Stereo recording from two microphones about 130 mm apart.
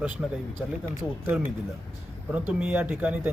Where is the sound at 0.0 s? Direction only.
10° right (ahead or behind).